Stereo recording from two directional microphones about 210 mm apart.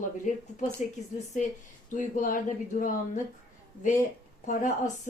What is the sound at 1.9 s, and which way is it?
Speech, 40° left (ahead or behind).